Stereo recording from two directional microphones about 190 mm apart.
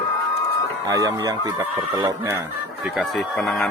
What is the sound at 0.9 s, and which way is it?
Speech, 20° right (ahead or behind).